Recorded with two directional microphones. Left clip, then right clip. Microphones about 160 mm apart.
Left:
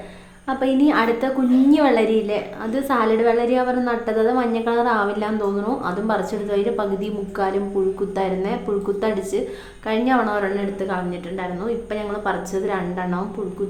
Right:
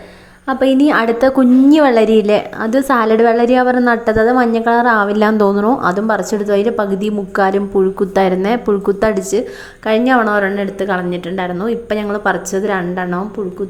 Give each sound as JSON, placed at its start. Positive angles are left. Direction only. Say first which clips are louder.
{"t": 0.4, "sound": "a woman's voice", "louder": "right 6 dB", "side_deg": -40}